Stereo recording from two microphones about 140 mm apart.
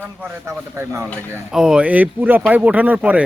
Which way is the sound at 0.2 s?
15° right (ahead or behind).